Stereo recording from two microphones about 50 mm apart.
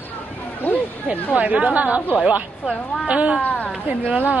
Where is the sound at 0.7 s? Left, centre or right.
Left.